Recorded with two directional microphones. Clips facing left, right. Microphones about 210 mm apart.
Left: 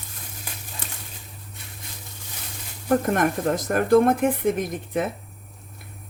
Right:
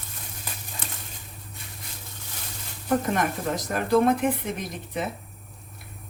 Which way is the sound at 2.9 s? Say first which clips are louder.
Left 4 dB; 50° left (ahead or behind).